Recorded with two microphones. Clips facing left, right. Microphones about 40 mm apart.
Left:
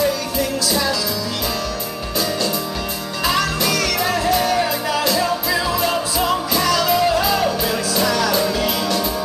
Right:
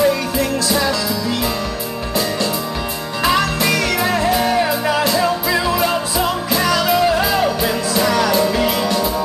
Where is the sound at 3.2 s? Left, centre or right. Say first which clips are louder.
Right 3 dB; centre.